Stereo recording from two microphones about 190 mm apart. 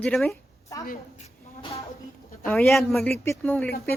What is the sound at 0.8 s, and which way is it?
Speech, 45° left (ahead or behind).